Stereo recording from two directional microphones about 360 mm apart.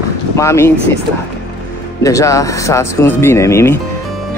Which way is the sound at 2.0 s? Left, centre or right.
Centre.